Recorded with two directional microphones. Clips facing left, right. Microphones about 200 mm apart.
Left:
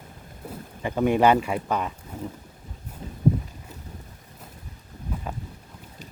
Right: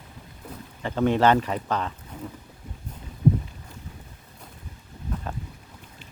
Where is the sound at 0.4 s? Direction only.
10° left (ahead or behind).